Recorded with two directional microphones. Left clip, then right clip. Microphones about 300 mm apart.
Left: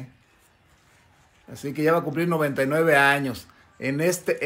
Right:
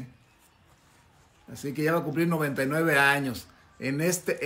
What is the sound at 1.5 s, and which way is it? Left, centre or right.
Speech, centre.